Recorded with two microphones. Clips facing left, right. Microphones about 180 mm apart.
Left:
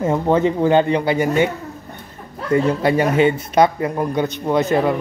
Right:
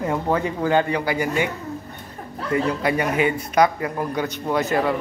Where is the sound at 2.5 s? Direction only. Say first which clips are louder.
Left 5 dB; 30° left (ahead or behind).